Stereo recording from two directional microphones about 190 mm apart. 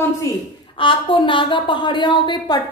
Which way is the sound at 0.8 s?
25° left (ahead or behind).